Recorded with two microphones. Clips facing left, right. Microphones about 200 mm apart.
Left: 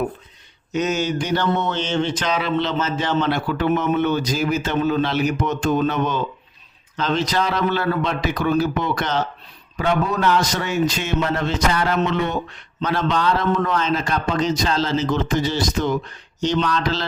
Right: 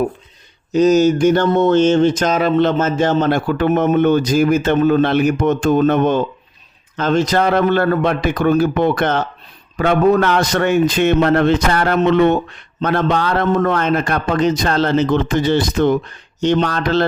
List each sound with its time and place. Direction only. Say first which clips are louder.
0.7 s a man's voice: right 10 dB; 35° right (ahead or behind); by 17.1 s 55° right (ahead or behind)